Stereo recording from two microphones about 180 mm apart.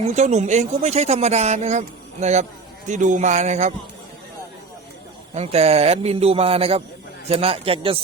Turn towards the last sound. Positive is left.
turn(degrees=-30)  # may be behind; listen again after turning